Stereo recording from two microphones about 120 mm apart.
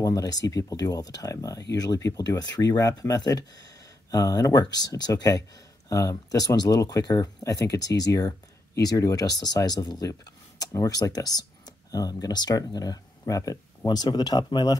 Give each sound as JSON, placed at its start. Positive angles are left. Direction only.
{"t": 0.0, "sound": "speech", "side_deg": 30}